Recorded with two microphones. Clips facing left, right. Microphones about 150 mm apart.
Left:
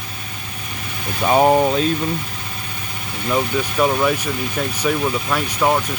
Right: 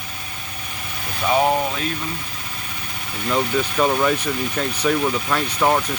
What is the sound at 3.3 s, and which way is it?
Speech, 5° left (ahead or behind).